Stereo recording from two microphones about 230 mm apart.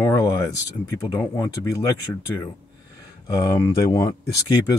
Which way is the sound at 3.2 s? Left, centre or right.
Centre.